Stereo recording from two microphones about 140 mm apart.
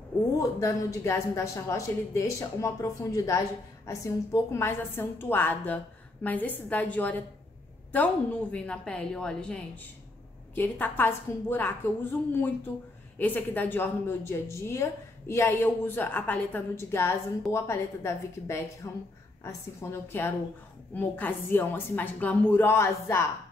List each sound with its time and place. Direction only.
0.4 s a woman's voice: 20° left (ahead or behind)
13.2 s a woman's voice: 10° left (ahead or behind)